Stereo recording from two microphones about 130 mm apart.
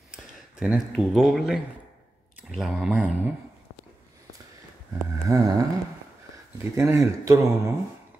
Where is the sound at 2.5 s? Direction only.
Centre (ahead or behind).